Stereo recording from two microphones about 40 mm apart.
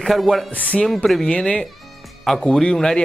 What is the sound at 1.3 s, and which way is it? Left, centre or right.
Speech, left.